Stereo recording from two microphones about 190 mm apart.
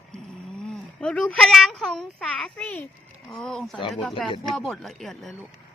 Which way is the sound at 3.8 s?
25° left (ahead or behind).